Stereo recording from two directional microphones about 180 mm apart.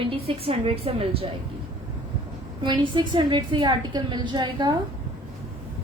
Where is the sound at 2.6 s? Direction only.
25° right (ahead or behind).